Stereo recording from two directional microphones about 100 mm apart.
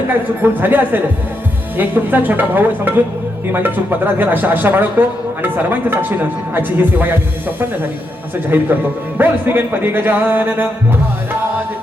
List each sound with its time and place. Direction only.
0.1 s speech: 20° right (ahead or behind)
8.5 s speech: 20° right (ahead or behind)